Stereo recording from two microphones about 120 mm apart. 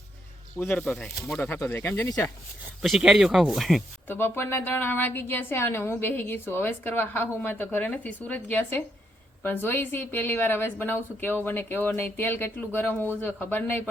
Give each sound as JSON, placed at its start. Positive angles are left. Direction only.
{"t": 0.6, "sound": "a woman's voice", "side_deg": 15}
{"t": 0.9, "sound": "speech", "side_deg": 0}
{"t": 1.4, "sound": "a woman's voice", "side_deg": 15}
{"t": 2.8, "sound": "speech", "side_deg": 0}
{"t": 4.1, "sound": "a woman's voice", "side_deg": 20}